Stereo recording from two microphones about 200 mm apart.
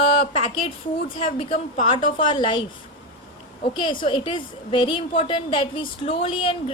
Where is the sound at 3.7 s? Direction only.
25° left (ahead or behind).